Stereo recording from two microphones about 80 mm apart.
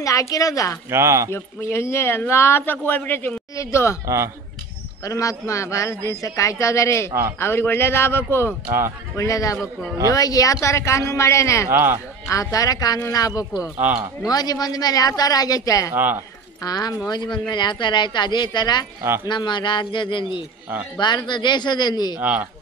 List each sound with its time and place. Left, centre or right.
0.0 s speech: left
0.8 s speech: right
1.3 s speech: left
3.5 s speech: left
5.0 s a man's voice: left
9.1 s speech: left
11.7 s speech: right
12.3 s speech: left
13.7 s speech: right
14.3 s speech: left
15.9 s speech: right
16.6 s a man's voice: left
21.0 s speech: left